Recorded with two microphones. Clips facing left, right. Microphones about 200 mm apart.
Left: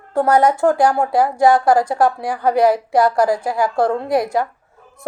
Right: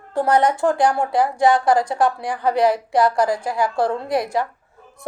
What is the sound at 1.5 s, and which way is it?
Speech, 25° left (ahead or behind).